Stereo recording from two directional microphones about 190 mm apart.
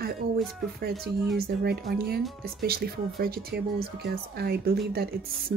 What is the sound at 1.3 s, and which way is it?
A woman's voice, 55° right (ahead or behind).